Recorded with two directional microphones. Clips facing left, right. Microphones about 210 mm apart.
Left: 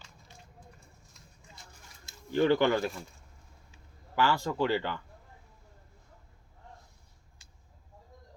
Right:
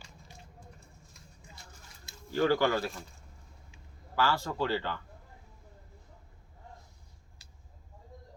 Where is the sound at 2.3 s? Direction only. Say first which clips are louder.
Left 2 dB; 20° left (ahead or behind).